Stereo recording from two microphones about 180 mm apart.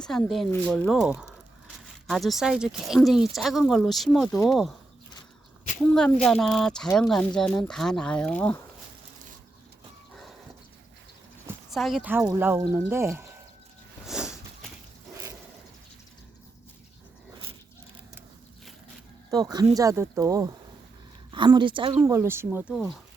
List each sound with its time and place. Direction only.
0.0 s speech: 5° left (ahead or behind)
5.8 s a woman's voice: 5° left (ahead or behind)
11.7 s speech: centre (ahead or behind)
14.1 s a sound: 5° right (ahead or behind)
19.3 s a woman's voice: 20° right (ahead or behind)
22.7 s speech: centre (ahead or behind)